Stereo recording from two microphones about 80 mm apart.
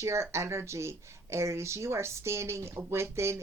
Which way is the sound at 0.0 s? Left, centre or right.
Right.